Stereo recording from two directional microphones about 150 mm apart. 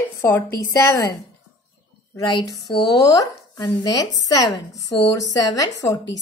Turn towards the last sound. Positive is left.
turn(degrees=25)  # may be behind; listen again after turning